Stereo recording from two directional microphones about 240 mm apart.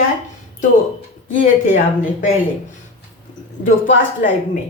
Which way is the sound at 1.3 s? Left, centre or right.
Left.